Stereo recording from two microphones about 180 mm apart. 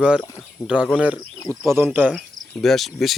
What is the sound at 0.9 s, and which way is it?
Speech, 10° right (ahead or behind).